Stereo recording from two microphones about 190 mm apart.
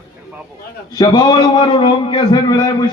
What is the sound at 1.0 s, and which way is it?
A man's voice, 25° left (ahead or behind).